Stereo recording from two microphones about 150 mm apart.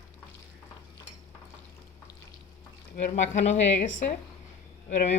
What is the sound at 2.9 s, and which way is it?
A woman's voice, 55° left (ahead or behind).